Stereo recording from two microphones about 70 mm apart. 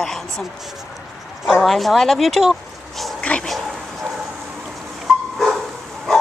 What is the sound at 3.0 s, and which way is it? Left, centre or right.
Dog, centre.